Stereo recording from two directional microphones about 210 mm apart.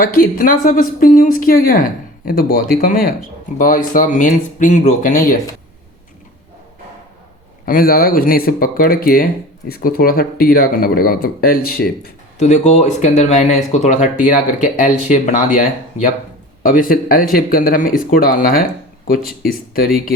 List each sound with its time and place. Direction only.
0.0 s a woman's voice: 40° left (ahead or behind)
7.6 s a woman's voice: 45° left (ahead or behind)